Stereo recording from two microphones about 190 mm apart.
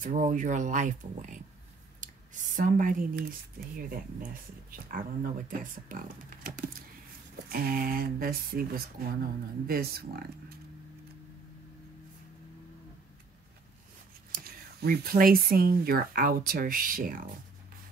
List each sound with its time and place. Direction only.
0.0 s speech: 45° right (ahead or behind)
2.0 s a sound: 45° right (ahead or behind)
2.5 s speech: 45° right (ahead or behind)
14.3 s speech: 50° right (ahead or behind)